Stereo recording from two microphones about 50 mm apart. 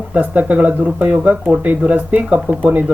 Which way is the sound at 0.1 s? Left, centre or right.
Right.